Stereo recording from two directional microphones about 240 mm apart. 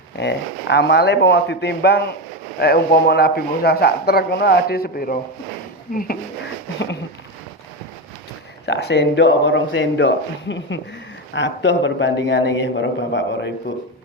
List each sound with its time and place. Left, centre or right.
0.2 s a man's voice: left
8.6 s a man's voice: left